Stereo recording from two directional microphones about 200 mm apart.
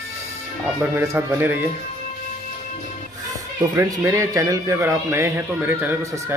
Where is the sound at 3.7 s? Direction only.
15° right (ahead or behind).